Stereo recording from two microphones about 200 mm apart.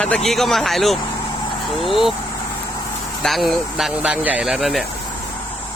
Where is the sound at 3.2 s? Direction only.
Centre (ahead or behind).